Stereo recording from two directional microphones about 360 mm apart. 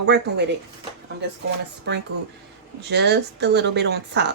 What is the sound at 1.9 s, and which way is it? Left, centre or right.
A woman's voice, right.